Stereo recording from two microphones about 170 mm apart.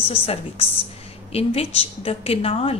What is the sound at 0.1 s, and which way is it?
Speech, 35° left (ahead or behind).